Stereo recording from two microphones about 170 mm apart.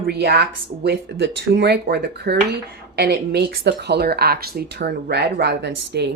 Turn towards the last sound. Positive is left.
turn(degrees=-75)  # may be behind; listen again after turning